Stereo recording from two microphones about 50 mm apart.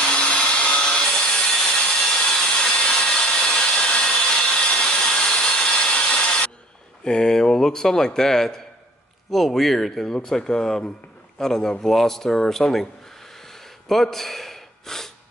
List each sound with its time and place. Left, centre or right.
0.0 s wood: left
2.1 s sawing: centre
7.1 s a man's voice: centre
13.5 s gasp: centre